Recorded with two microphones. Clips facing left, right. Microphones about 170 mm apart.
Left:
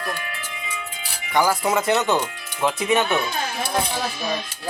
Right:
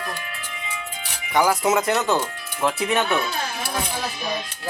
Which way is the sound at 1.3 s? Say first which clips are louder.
Right 1 dB; centre (ahead or behind).